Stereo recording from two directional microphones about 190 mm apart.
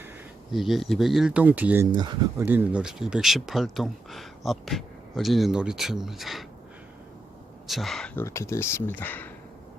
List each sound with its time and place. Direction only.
0.5 s speech: centre (ahead or behind)
7.7 s speech: centre (ahead or behind)